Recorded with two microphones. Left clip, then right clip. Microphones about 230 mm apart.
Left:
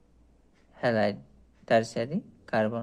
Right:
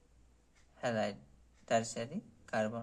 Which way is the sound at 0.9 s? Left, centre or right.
Left.